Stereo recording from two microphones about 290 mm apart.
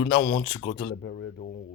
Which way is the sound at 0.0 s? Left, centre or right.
Left.